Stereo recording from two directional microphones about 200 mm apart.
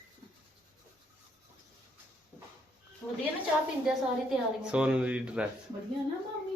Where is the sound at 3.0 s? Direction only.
10° left (ahead or behind).